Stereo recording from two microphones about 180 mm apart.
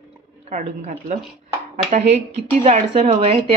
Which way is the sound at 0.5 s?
45° right (ahead or behind).